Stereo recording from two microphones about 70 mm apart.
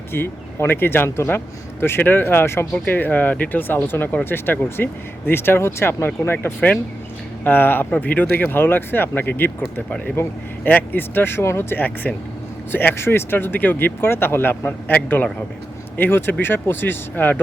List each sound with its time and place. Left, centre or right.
0.1 s speech: left
10.6 s speech: left